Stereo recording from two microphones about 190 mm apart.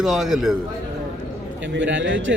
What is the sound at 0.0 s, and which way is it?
Speech, centre (ahead or behind).